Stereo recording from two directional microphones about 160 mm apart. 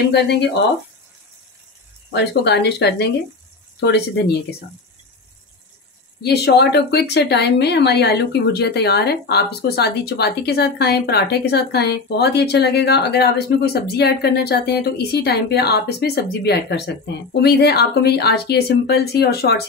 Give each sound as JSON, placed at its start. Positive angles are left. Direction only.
{"t": 0.1, "sound": "speech", "side_deg": 90}
{"t": 2.1, "sound": "speech", "side_deg": 90}
{"t": 6.2, "sound": "speech", "side_deg": 90}